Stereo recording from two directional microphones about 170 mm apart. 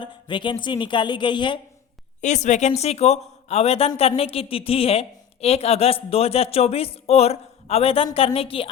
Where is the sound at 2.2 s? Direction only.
45° left (ahead or behind).